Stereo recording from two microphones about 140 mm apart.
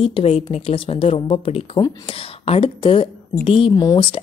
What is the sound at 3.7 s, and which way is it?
Speech, 30° left (ahead or behind).